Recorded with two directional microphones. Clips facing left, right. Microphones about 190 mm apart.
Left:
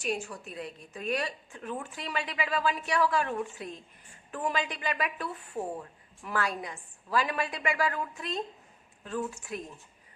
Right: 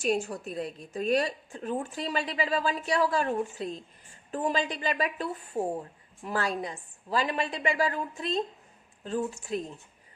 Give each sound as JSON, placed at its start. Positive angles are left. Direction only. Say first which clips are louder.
{"t": 0.0, "sound": "a woman's voice", "louder": "right 5 dB", "side_deg": -35}